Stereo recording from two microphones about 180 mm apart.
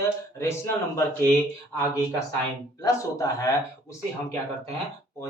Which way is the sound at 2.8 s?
20° left (ahead or behind).